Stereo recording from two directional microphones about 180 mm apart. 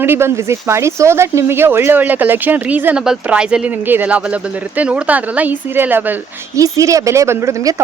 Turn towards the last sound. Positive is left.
turn(degrees=-15)  # may be behind; listen again after turning